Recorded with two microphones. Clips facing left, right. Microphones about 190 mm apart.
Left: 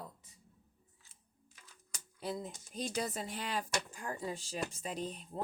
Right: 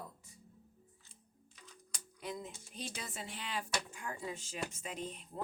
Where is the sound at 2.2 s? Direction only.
35° left (ahead or behind).